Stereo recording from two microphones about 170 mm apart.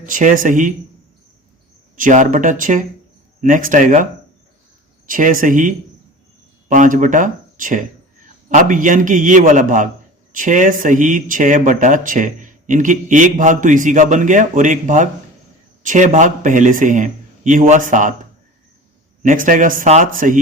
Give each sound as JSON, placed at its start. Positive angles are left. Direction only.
{"t": 0.0, "sound": "speech", "side_deg": -50}
{"t": 2.0, "sound": "speech", "side_deg": -50}
{"t": 5.0, "sound": "speech", "side_deg": -55}
{"t": 19.2, "sound": "speech", "side_deg": -50}